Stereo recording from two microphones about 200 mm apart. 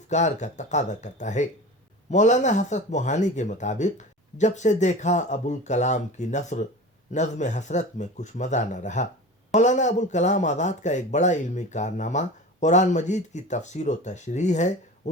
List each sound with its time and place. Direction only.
0.1 s speech: 35° left (ahead or behind)